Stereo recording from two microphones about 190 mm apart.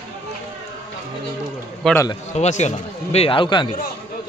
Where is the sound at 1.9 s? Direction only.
15° left (ahead or behind).